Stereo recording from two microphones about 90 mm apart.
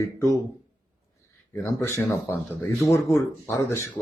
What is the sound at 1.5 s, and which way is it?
Speech, 25° left (ahead or behind).